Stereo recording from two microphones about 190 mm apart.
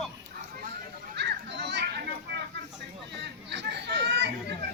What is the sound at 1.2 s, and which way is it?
Children playing, 65° right (ahead or behind).